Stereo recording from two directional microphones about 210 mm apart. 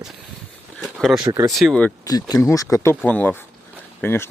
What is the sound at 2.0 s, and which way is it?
Speech, 20° left (ahead or behind).